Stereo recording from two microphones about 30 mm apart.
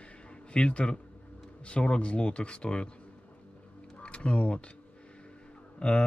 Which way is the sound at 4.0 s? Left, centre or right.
Left.